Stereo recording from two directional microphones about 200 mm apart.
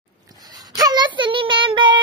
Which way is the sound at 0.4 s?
20° right (ahead or behind).